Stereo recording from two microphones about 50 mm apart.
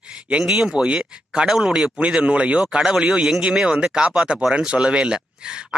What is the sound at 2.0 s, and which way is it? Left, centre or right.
Speech, right.